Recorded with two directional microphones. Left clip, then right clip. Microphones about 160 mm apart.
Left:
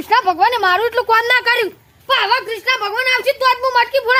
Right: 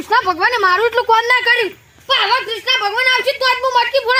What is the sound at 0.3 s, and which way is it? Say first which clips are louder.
Speech: even; 45° left (ahead or behind).